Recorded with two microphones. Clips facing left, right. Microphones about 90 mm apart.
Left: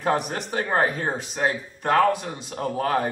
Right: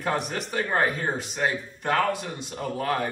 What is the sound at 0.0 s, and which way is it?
Speech, 35° left (ahead or behind).